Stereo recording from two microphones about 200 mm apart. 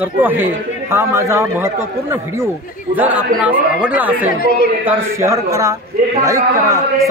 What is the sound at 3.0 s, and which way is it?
A man's voice, 10° right (ahead or behind).